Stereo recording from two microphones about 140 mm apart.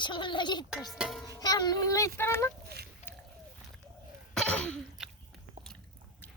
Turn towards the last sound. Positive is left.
turn(degrees=-5)  # may be behind; listen again after turning